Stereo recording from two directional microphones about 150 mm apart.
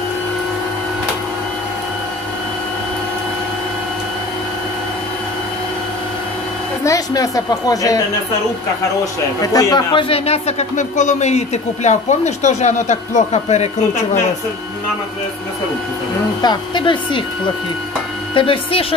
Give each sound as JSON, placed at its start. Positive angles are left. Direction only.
{"t": 6.8, "sound": "a woman's voice", "side_deg": 20}
{"t": 9.4, "sound": "a man's voice", "side_deg": 25}
{"t": 16.3, "sound": "a woman's voice", "side_deg": 30}
{"t": 18.3, "sound": "a woman's voice", "side_deg": 35}